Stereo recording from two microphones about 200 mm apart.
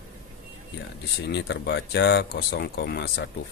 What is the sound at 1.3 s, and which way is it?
Speech, 60° left (ahead or behind).